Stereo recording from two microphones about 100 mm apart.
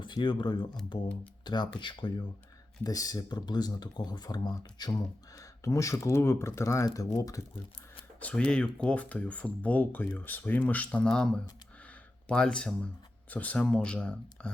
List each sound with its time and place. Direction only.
0.0 s speech: 50° left (ahead or behind)
2.8 s speech: 35° left (ahead or behind)
5.4 s speech: 35° left (ahead or behind)
8.2 s speech: 10° left (ahead or behind)
12.3 s speech: 10° left (ahead or behind)